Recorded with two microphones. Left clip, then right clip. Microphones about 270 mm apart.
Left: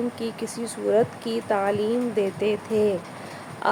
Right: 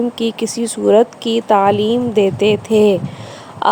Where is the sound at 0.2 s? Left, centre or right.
Right.